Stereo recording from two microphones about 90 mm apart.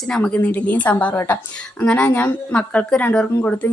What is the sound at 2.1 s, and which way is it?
Speech, 20° left (ahead or behind).